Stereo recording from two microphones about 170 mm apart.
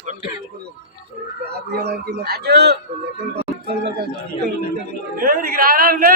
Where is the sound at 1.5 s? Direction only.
70° right (ahead or behind).